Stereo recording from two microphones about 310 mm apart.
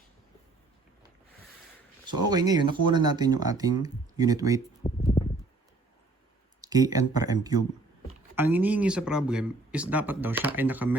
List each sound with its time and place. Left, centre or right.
2.3 s speech: centre
4.8 s speech: centre
6.6 s speech: centre